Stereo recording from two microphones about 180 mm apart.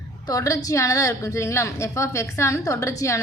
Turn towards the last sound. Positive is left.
turn(degrees=20)  # may be behind; listen again after turning